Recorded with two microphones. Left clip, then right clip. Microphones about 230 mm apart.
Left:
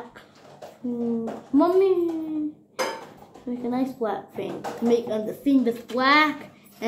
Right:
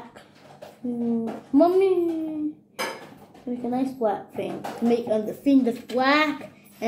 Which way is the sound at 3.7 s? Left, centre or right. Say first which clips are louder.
Right 2 dB; centre.